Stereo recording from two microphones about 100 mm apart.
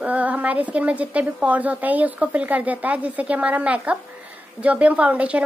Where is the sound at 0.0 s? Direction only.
15° right (ahead or behind).